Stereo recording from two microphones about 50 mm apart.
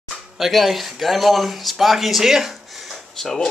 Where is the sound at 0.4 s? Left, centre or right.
Centre.